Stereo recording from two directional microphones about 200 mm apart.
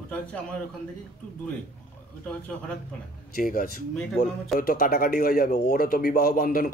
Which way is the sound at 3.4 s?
45° left (ahead or behind).